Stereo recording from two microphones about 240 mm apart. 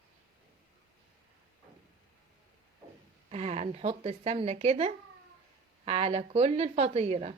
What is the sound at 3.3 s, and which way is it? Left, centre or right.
Speech, right.